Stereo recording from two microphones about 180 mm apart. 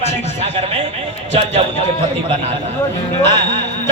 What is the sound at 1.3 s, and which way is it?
Speech, 35° right (ahead or behind).